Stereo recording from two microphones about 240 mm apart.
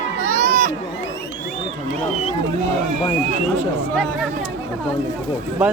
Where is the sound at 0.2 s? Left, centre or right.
Right.